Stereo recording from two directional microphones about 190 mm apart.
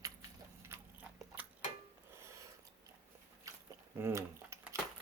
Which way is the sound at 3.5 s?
15° right (ahead or behind).